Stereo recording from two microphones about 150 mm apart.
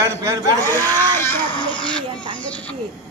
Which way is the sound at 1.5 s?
35° left (ahead or behind).